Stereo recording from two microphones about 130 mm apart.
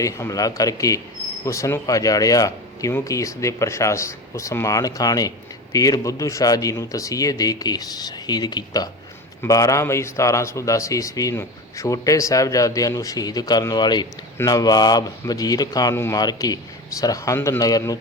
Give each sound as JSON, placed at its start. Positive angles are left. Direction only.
{"t": 0.0, "sound": "speech", "side_deg": 25}